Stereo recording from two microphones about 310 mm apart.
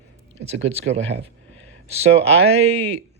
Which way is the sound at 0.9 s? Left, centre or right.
Right.